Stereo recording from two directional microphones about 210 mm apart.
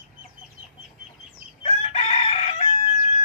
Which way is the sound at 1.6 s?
30° left (ahead or behind).